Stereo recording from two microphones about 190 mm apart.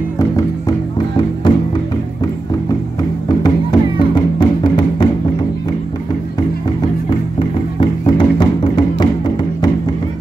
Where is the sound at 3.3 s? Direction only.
20° left (ahead or behind).